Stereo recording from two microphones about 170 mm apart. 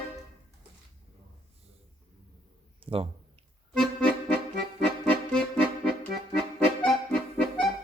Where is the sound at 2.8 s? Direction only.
35° right (ahead or behind).